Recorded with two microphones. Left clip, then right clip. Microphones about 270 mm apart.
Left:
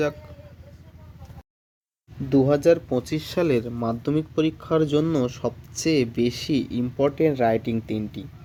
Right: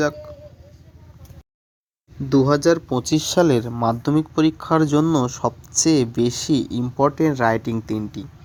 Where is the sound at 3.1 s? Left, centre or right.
Right.